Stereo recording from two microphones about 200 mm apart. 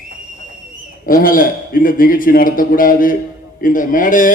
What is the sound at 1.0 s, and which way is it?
A man's voice, 45° left (ahead or behind).